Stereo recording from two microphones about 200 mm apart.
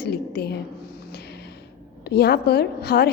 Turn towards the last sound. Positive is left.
turn(degrees=55)  # may be behind; listen again after turning